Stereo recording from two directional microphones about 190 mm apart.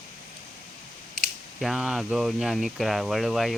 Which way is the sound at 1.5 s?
Centre (ahead or behind).